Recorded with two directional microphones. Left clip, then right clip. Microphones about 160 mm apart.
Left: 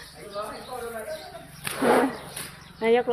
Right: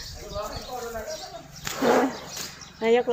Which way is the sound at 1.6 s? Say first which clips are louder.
Even; 20° left (ahead or behind).